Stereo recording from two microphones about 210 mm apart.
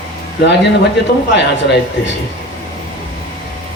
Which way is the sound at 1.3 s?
55° left (ahead or behind).